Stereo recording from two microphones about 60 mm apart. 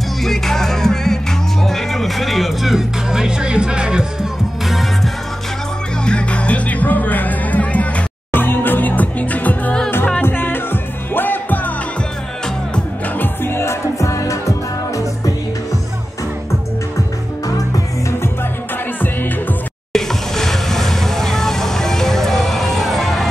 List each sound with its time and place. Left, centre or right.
0.2 s music: centre
4.6 s music: centre
6.0 s music: centre
8.3 s music: left
10.2 s music: left
13.2 s music: left
19.9 s vehicle: centre